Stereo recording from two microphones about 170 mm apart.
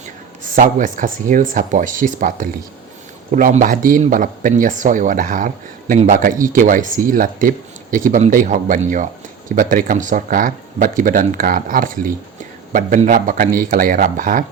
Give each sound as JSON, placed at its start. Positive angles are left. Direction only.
{"t": 0.4, "sound": "speech", "side_deg": -50}